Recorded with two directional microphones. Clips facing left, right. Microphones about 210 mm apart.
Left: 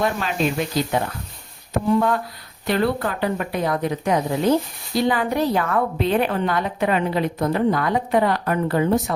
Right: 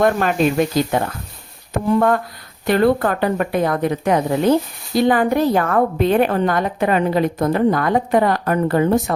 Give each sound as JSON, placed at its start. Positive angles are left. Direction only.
{"t": 0.0, "sound": "a woman's voice", "side_deg": -55}